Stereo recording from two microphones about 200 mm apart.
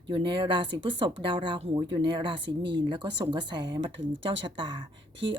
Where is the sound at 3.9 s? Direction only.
65° right (ahead or behind).